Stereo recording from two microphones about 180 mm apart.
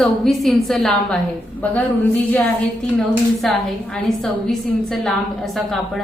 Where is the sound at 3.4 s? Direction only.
5° left (ahead or behind).